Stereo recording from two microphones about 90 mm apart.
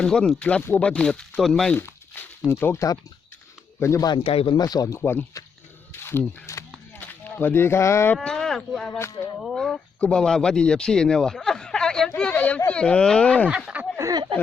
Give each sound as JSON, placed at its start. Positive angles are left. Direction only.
{"t": 0.0, "sound": "speech", "side_deg": 10}
{"t": 1.7, "sound": "crumpling", "side_deg": 25}
{"t": 2.5, "sound": "speech", "side_deg": 25}
{"t": 2.7, "sound": "speech", "side_deg": 40}
{"t": 4.2, "sound": "speech", "side_deg": 90}
{"t": 4.5, "sound": "speech", "side_deg": 45}
{"t": 4.9, "sound": "speech", "side_deg": 25}
{"t": 5.9, "sound": "single-lens reflex camera", "side_deg": 25}
{"t": 7.0, "sound": "speech", "side_deg": 20}
{"t": 8.1, "sound": "speech", "side_deg": 10}
{"t": 9.0, "sound": "speech", "side_deg": 30}
{"t": 9.4, "sound": "speech", "side_deg": 0}
{"t": 14.0, "sound": "speech", "side_deg": -45}